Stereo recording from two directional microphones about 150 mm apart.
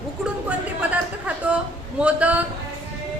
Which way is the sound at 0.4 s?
10° right (ahead or behind).